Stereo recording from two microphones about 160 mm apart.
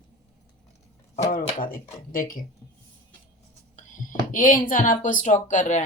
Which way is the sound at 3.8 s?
55° left (ahead or behind).